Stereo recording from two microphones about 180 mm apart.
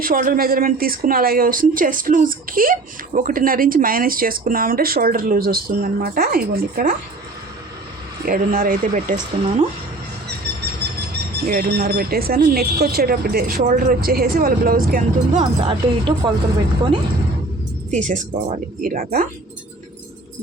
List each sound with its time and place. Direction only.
0.0 s speech: 55° right (ahead or behind)
8.2 s speech: 55° right (ahead or behind)
11.4 s speech: 60° right (ahead or behind)
15.4 s speech: 30° right (ahead or behind)
17.9 s speech: 45° right (ahead or behind)